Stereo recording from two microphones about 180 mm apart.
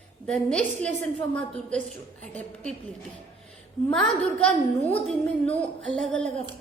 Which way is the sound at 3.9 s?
5° left (ahead or behind).